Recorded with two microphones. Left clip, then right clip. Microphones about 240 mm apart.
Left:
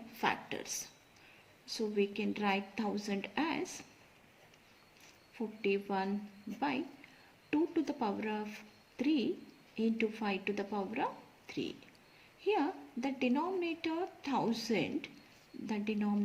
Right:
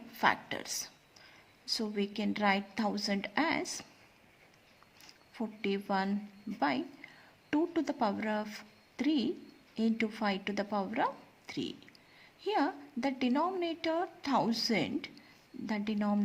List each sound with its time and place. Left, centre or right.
0.2 s a woman's voice: right
1.6 s a woman's voice: right
5.6 s a woman's voice: right
7.5 s a woman's voice: right
8.5 s a sound: right
9.7 s a woman's voice: right